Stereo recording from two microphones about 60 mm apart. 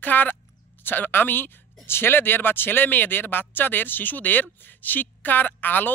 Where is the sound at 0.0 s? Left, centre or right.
Left.